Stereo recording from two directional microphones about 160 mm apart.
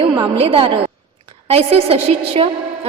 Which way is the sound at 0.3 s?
35° right (ahead or behind).